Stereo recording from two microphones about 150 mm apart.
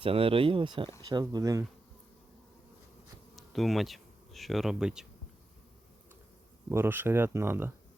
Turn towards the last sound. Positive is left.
turn(degrees=-15)  # may be behind; listen again after turning